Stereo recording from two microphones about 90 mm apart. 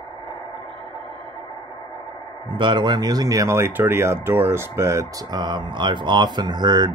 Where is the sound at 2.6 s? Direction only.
60° right (ahead or behind); by 5.1 s 30° right (ahead or behind).